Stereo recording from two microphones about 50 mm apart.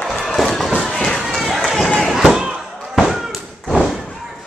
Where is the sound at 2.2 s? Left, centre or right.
Centre.